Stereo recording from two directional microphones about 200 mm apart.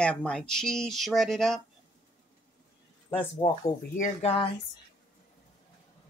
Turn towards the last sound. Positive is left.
turn(degrees=35)  # may be behind; listen again after turning